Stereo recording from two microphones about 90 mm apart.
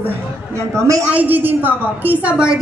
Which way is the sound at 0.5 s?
35° right (ahead or behind).